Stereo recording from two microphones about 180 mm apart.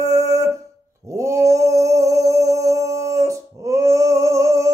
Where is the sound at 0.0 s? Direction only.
20° right (ahead or behind).